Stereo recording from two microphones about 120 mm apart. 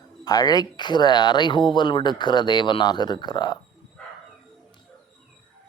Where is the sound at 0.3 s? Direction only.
35° left (ahead or behind).